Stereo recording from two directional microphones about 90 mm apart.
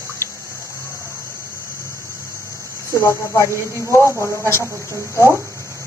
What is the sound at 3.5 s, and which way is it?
Speech, 35° right (ahead or behind).